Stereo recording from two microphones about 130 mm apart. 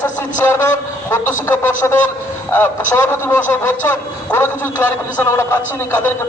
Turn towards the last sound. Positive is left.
turn(degrees=15)  # may be behind; listen again after turning